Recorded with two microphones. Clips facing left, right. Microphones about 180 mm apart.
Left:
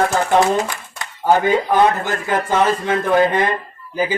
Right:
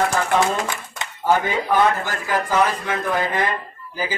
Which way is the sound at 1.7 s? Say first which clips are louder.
Left 3 dB; 25° left (ahead or behind).